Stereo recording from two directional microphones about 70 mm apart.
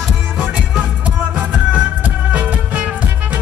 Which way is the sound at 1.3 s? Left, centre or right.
Centre.